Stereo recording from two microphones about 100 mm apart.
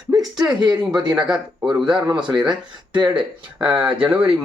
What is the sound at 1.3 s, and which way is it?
Speech, 5° right (ahead or behind).